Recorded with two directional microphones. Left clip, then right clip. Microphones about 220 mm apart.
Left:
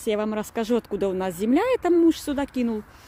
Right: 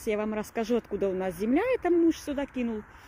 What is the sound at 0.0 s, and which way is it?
Speech, 10° left (ahead or behind).